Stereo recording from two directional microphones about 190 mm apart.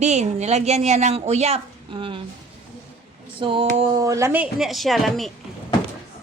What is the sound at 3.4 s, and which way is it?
Speech, 30° right (ahead or behind).